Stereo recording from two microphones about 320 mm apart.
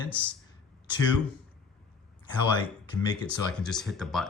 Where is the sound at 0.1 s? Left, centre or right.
Centre.